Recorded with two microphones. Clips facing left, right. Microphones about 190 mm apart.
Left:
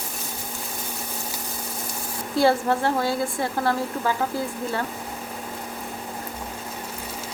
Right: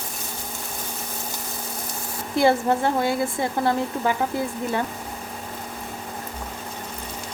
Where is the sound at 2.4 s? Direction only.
20° right (ahead or behind).